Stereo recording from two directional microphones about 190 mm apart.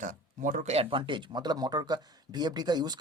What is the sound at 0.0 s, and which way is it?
Speech, 40° right (ahead or behind).